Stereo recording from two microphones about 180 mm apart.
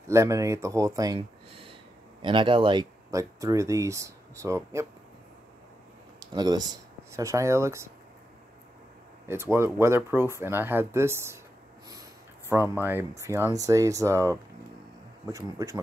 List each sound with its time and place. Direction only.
0.1 s speech: 15° right (ahead or behind)
6.1 s speech: 20° right (ahead or behind)
9.3 s speech: 15° right (ahead or behind)